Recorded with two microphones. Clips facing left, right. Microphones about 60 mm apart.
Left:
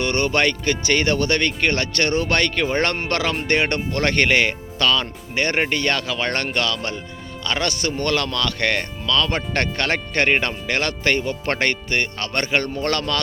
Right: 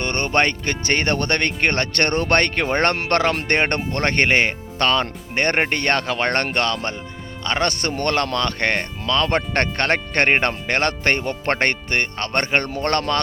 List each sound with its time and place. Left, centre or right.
0.0 s speech: right